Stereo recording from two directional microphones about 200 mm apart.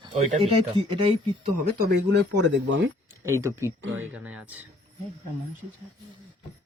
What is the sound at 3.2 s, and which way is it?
Speech, 15° right (ahead or behind).